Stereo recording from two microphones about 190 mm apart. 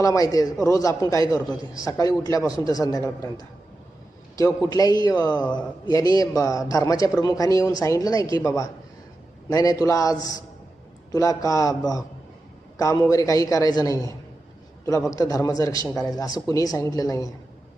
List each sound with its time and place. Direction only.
0.0 s a man's voice: 20° left (ahead or behind)